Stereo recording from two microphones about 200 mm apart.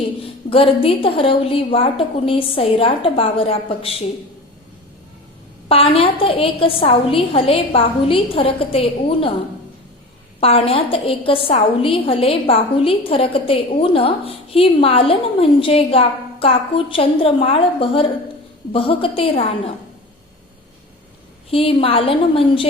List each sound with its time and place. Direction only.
0.2 s a woman's voice: 30° left (ahead or behind)
5.6 s a woman's voice: 30° left (ahead or behind)
10.4 s a woman's voice: 30° left (ahead or behind)
21.5 s a woman's voice: 30° left (ahead or behind)